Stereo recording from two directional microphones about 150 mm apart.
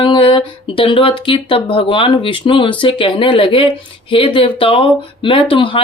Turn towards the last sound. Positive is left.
turn(degrees=35)  # may be behind; listen again after turning